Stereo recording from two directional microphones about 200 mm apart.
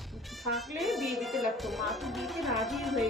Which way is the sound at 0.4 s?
Centre (ahead or behind).